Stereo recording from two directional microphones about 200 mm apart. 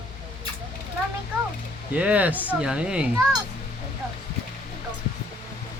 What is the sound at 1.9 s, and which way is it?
Speech, 5° right (ahead or behind).